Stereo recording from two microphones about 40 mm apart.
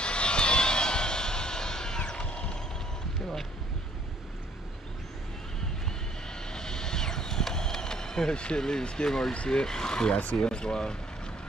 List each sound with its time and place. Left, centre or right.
0.0 s vehicle: left
6.5 s vehicle: centre
8.6 s speech: centre